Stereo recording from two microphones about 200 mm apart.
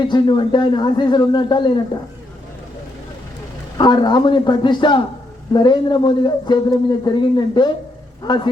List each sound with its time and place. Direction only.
0.0 s speech: 25° left (ahead or behind)
3.8 s speech: 20° left (ahead or behind)